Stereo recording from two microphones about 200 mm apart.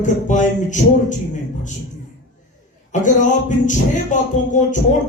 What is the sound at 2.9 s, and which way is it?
Speech, 40° left (ahead or behind).